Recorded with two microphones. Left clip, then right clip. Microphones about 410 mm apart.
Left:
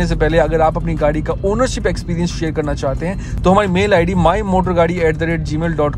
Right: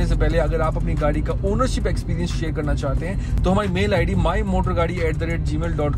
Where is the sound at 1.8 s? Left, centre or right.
Centre.